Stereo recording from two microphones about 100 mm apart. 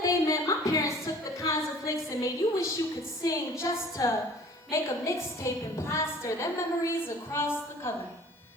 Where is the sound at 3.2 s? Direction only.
30° left (ahead or behind).